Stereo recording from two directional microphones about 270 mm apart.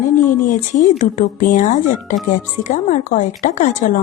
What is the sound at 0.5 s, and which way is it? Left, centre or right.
A woman's voice, left.